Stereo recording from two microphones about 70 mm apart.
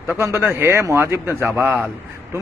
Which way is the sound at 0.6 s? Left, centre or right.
Right.